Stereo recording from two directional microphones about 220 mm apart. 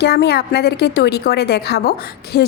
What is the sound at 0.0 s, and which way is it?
A woman's voice, 50° left (ahead or behind).